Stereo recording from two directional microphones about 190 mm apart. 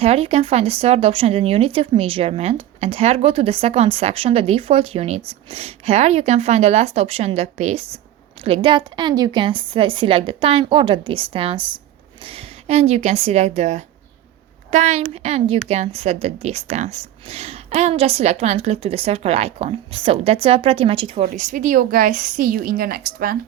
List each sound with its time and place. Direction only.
0.0 s a woman's voice: 30° right (ahead or behind); by 23.4 s 50° right (ahead or behind)